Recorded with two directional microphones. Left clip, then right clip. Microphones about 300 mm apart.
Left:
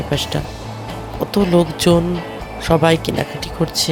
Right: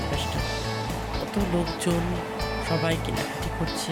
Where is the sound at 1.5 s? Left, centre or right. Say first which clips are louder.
Left 14 dB; left.